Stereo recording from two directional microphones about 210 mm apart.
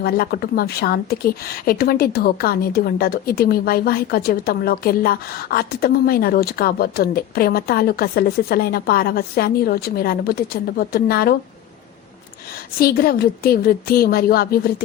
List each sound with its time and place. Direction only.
0.0 s a woman's voice: 45° left (ahead or behind)
12.8 s a woman's voice: 45° left (ahead or behind)